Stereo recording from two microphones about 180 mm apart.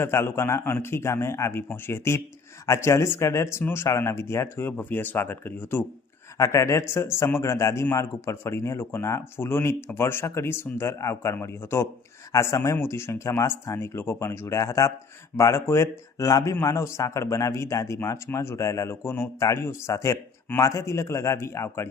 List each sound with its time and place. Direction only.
0.0 s a man's voice: 15° left (ahead or behind)